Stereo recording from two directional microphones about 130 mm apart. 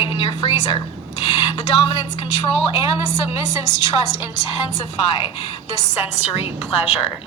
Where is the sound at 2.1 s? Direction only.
50° left (ahead or behind).